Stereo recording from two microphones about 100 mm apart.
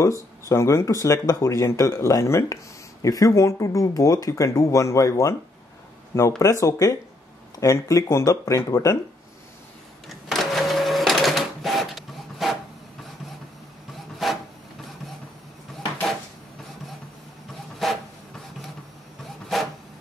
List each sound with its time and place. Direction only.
0.0 s speech: 30° left (ahead or behind)
6.4 s speech: 35° left (ahead or behind)
10.0 s printer: centre (ahead or behind)
14.1 s wood: centre (ahead or behind)
17.8 s a sound: centre (ahead or behind)
19.5 s printer: centre (ahead or behind)